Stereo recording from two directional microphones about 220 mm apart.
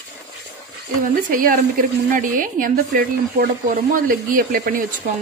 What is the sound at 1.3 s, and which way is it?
Speech, 40° right (ahead or behind).